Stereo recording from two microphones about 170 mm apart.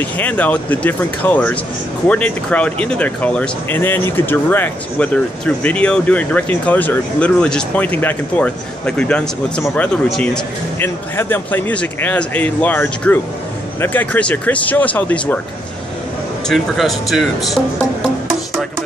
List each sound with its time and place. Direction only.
0.0 s speech: 10° left (ahead or behind)
16.4 s speech: centre (ahead or behind)